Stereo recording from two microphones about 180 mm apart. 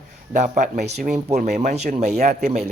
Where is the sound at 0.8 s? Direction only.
65° right (ahead or behind).